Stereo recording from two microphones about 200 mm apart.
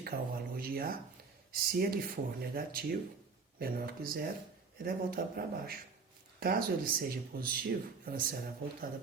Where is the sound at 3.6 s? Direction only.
50° right (ahead or behind).